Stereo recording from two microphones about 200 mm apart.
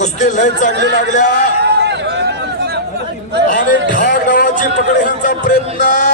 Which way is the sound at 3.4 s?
40° left (ahead or behind).